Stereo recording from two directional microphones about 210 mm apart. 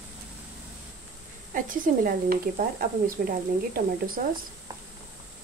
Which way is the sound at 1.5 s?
40° right (ahead or behind).